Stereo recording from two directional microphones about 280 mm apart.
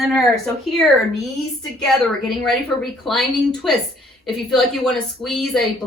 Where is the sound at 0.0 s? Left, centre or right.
Centre.